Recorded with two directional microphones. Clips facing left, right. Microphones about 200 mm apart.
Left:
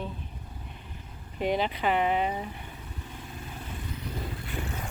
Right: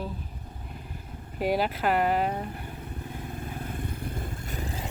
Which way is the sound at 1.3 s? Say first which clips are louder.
Right 1 dB; 5° right (ahead or behind).